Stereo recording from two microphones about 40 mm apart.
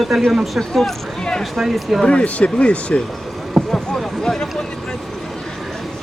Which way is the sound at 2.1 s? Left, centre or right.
Left.